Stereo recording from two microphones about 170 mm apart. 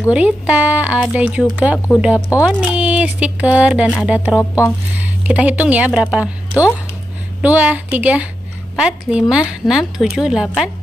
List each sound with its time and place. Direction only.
0.1 s a woman's voice: 5° right (ahead or behind)
4.4 s speech: 15° left (ahead or behind)
4.9 s speech: 10° right (ahead or behind)
7.4 s a woman's voice: 10° right (ahead or behind)